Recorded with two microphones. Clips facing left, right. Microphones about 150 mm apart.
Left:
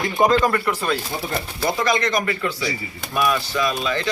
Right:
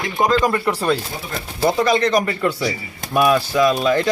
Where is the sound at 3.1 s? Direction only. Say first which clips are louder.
Right 5 dB; 50° right (ahead or behind).